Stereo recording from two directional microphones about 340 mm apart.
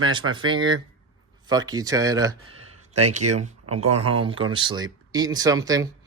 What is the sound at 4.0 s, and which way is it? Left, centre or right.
Speech, right.